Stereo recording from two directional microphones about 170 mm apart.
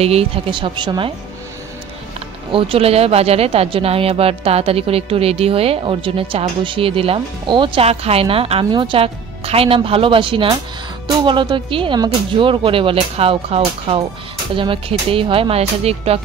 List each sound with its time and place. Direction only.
0.0 s speech: 35° right (ahead or behind)
2.5 s speech: 35° right (ahead or behind)